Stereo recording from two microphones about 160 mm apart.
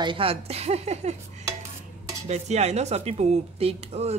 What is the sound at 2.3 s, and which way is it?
Speech, 45° right (ahead or behind).